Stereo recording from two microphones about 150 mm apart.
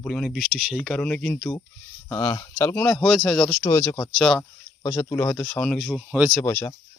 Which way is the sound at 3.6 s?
15° left (ahead or behind).